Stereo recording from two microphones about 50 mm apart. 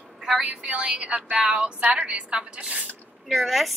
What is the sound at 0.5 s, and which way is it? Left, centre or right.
A woman's voice, right.